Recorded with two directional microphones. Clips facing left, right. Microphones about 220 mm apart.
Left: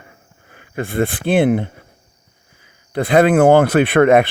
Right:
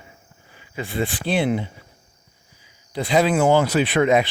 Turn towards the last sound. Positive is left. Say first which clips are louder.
# left 6 dB
turn(degrees=55)  # may be behind; listen again after turning